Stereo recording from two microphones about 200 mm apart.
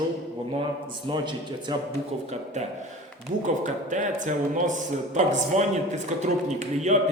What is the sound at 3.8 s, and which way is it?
Speech, 40° right (ahead or behind).